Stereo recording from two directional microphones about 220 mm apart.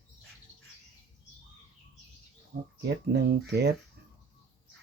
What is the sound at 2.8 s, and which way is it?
Speech, 45° right (ahead or behind).